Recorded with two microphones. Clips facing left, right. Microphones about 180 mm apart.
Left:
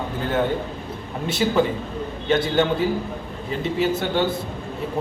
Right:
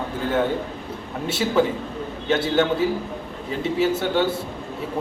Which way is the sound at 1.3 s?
5° right (ahead or behind).